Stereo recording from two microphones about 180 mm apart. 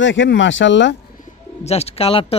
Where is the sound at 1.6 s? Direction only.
35° left (ahead or behind).